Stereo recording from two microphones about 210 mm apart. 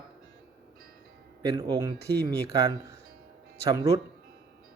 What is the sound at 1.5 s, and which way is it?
Speech, 20° right (ahead or behind).